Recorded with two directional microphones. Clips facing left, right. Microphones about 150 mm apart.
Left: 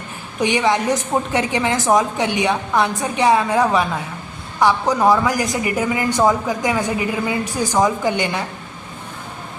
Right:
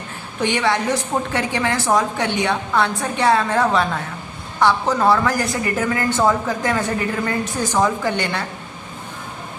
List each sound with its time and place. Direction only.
0.3 s a woman's voice: 20° left (ahead or behind)